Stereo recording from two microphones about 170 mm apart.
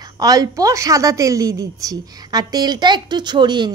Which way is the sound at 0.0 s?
20° right (ahead or behind).